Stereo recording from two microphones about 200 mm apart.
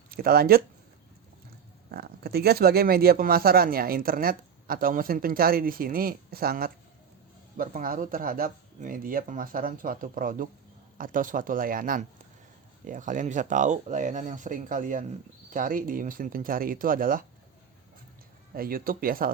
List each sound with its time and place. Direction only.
0.1 s speech: 50° right (ahead or behind)
1.9 s speech: 50° right (ahead or behind)
18.5 s speech: 45° right (ahead or behind)